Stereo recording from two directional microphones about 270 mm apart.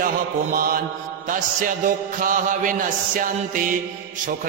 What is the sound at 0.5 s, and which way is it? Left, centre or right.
Music, right.